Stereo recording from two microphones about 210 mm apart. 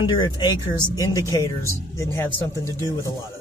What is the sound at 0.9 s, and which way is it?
Speech, 15° left (ahead or behind).